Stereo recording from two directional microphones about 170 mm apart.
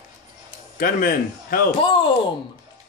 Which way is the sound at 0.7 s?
60° left (ahead or behind).